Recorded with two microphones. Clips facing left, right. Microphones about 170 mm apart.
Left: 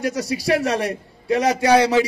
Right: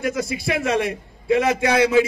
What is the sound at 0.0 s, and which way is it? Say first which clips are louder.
A man's voice: left 1 dB; 35° left (ahead or behind).